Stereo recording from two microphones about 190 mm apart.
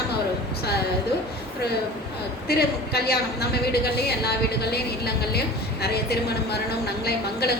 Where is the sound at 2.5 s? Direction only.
55° left (ahead or behind).